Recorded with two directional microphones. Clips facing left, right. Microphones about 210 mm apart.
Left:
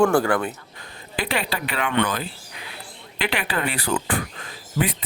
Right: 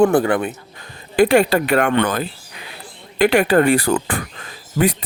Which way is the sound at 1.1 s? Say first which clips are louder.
Right 13 dB; 50° right (ahead or behind).